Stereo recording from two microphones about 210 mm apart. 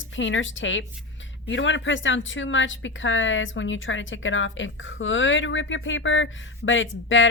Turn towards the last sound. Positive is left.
turn(degrees=65)  # may be behind; listen again after turning